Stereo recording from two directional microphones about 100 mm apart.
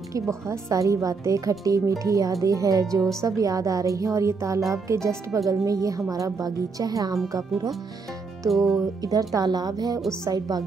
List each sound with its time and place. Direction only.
0.1 s speech: 30° right (ahead or behind)
8.5 s music: centre (ahead or behind)
9.0 s speech: 35° right (ahead or behind)